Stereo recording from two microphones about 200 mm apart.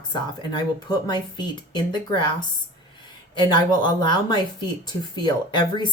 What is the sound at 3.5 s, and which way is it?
Speech, 20° left (ahead or behind).